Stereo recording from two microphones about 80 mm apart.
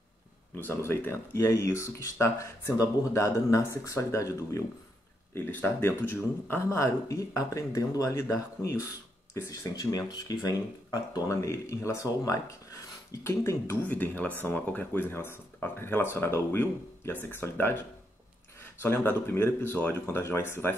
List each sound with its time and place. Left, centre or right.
0.6 s speech: left
5.3 s speech: left
13.8 s speech: left